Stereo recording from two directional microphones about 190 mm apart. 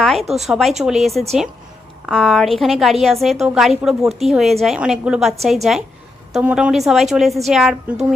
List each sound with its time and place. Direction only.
0.0 s a woman's voice: centre (ahead or behind)